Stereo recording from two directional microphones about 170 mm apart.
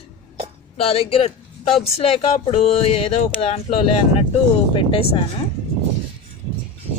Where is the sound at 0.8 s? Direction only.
35° left (ahead or behind).